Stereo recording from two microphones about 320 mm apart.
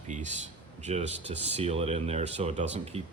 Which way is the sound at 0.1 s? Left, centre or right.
Right.